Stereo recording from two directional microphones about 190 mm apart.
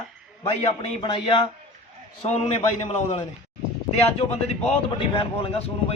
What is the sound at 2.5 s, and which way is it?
Speech, 30° left (ahead or behind).